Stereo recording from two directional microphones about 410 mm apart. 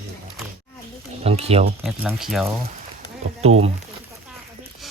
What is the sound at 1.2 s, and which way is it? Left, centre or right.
Speech, centre.